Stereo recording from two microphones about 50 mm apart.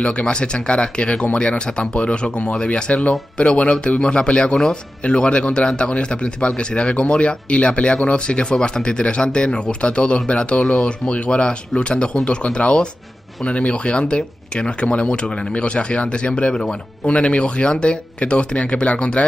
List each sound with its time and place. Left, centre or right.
0.0 s a man's voice: left